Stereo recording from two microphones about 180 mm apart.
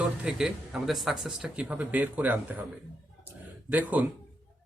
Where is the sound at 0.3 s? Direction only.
5° right (ahead or behind).